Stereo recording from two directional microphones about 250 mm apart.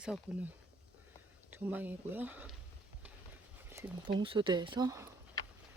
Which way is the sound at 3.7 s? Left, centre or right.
Centre.